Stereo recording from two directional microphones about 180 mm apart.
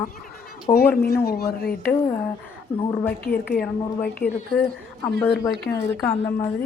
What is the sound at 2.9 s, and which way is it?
A woman's voice, 10° left (ahead or behind).